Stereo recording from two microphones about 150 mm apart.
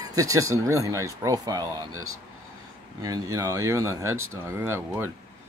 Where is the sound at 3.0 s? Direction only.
20° right (ahead or behind).